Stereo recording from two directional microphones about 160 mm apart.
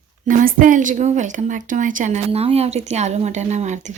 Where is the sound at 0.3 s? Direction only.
55° right (ahead or behind).